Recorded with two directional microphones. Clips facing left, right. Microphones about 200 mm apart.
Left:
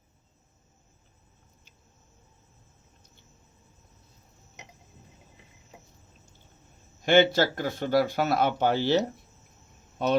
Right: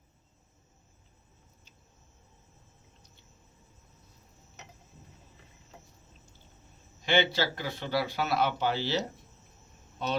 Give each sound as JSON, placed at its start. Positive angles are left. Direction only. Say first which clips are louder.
{"t": 5.7, "sound": "cricket", "louder": "left 2 dB", "side_deg": 15}
{"t": 7.0, "sound": "a man's voice", "louder": "left 7 dB", "side_deg": 50}